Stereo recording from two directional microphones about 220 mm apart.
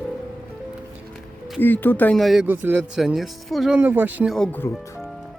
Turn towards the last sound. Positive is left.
turn(degrees=10)  # may be behind; listen again after turning